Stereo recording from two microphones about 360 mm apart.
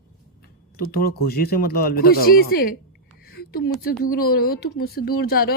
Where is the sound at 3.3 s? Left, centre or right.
Left.